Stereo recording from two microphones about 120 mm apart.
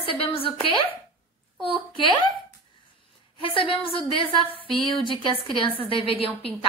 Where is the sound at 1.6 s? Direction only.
45° left (ahead or behind).